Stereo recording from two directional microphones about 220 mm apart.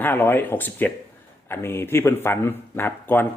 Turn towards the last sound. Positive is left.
turn(degrees=10)  # may be behind; listen again after turning